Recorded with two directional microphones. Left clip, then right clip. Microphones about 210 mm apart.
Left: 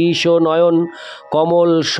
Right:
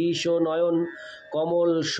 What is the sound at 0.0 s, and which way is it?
Speech, 50° left (ahead or behind).